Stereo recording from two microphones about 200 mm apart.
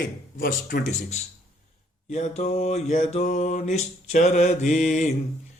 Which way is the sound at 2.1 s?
35° left (ahead or behind).